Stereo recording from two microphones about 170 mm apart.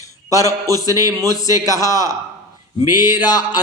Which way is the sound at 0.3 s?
20° left (ahead or behind).